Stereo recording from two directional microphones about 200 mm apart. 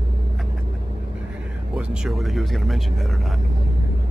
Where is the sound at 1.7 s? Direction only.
5° right (ahead or behind).